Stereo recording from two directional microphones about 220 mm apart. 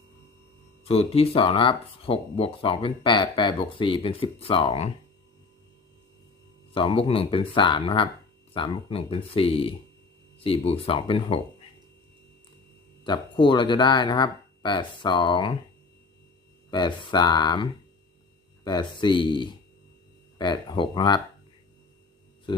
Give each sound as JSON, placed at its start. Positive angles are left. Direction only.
{"t": 0.9, "sound": "speech", "side_deg": 25}
{"t": 6.7, "sound": "speech", "side_deg": 25}
{"t": 13.1, "sound": "speech", "side_deg": 20}
{"t": 16.7, "sound": "speech", "side_deg": 20}